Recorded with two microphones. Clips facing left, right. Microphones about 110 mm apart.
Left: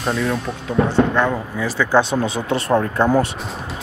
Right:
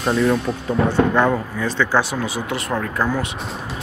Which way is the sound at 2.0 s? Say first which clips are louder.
Left 4 dB; 25° left (ahead or behind).